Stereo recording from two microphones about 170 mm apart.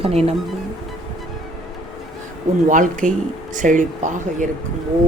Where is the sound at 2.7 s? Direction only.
50° right (ahead or behind).